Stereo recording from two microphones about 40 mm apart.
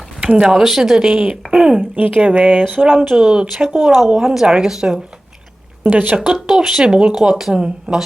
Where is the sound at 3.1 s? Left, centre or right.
Centre.